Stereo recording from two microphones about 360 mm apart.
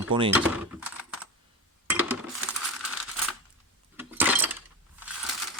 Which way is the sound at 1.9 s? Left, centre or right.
Centre.